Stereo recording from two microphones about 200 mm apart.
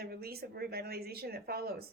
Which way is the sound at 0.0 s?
50° right (ahead or behind).